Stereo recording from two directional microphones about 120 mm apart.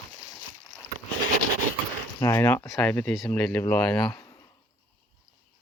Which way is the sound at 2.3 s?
15° left (ahead or behind).